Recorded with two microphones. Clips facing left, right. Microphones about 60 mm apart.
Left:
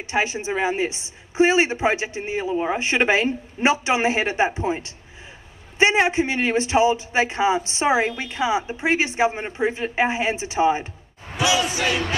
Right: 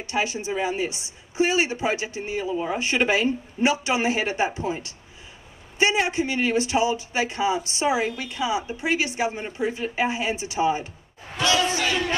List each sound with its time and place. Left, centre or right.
0.0 s a woman's voice: left
11.3 s speech: centre